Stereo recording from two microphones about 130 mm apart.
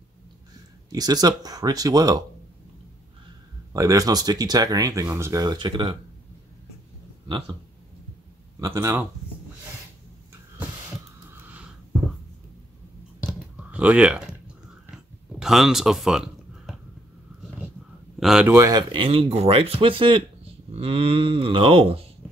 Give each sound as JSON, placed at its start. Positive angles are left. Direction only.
{"t": 0.8, "sound": "speech", "side_deg": -30}
{"t": 3.7, "sound": "speech", "side_deg": -25}
{"t": 8.6, "sound": "speech", "side_deg": -25}
{"t": 11.2, "sound": "a sound", "side_deg": -15}
{"t": 13.2, "sound": "a sound", "side_deg": -10}
{"t": 18.2, "sound": "speech", "side_deg": -5}
{"t": 18.5, "sound": "speech", "side_deg": -25}
{"t": 20.7, "sound": "speech", "side_deg": -50}